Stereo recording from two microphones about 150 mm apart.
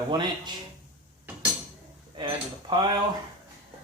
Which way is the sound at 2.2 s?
30° right (ahead or behind).